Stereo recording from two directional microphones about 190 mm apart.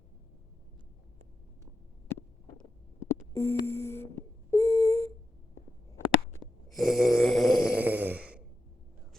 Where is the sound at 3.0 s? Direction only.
15° left (ahead or behind).